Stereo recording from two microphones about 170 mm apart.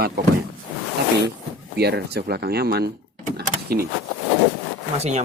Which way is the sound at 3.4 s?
65° right (ahead or behind).